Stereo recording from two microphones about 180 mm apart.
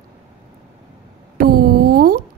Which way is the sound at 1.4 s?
55° right (ahead or behind).